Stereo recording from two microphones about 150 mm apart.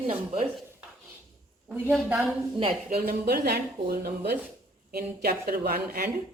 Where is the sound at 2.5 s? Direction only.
40° right (ahead or behind).